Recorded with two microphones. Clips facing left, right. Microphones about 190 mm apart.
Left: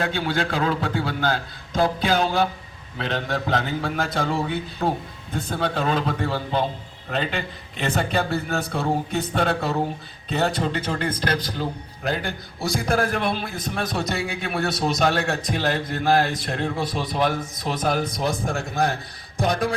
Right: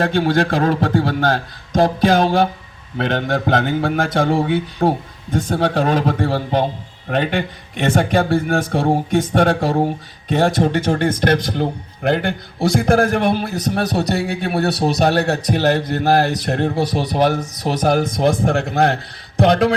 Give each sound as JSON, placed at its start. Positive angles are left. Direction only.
{"t": 0.0, "sound": "a man's voice", "side_deg": -45}
{"t": 5.4, "sound": "a man's voice", "side_deg": -80}
{"t": 5.8, "sound": "a man's voice", "side_deg": -50}
{"t": 18.2, "sound": "a man's voice", "side_deg": -65}